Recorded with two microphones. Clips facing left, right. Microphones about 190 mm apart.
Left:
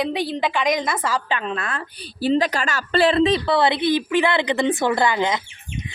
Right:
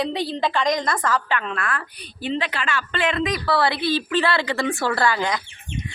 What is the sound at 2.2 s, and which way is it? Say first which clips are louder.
A woman's voice: left 6 dB; 40° left (ahead or behind).